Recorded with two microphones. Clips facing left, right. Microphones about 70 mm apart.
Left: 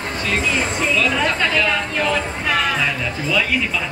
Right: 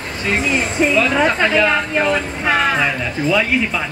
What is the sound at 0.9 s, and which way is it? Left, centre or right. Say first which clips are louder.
Speech: right 3 dB; right.